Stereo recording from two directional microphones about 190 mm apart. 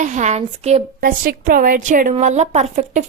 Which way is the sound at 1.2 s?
50° right (ahead or behind).